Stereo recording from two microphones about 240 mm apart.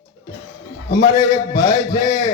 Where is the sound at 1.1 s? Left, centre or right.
Centre.